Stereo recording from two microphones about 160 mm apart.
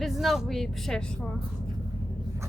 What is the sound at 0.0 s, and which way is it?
Speech, centre (ahead or behind).